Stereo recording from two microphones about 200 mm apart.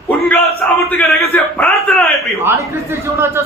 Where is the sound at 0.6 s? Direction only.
10° left (ahead or behind).